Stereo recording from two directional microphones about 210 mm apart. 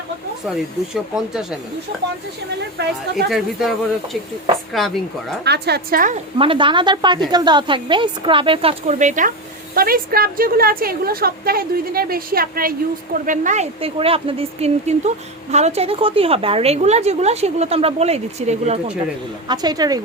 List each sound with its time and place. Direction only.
1.1 s speech: centre (ahead or behind)
2.6 s a woman's voice: 55° right (ahead or behind)
3.2 s speech: centre (ahead or behind)
5.5 s a woman's voice: 50° right (ahead or behind)
6.4 s a woman's voice: 25° right (ahead or behind)
19.5 s a woman's voice: 20° right (ahead or behind)